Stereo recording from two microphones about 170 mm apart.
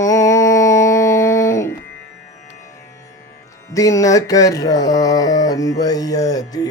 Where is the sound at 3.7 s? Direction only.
20° left (ahead or behind).